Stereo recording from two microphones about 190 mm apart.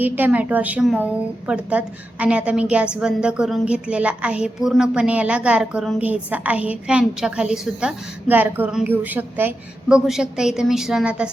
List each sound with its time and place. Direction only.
0.0 s a woman's voice: 10° right (ahead or behind)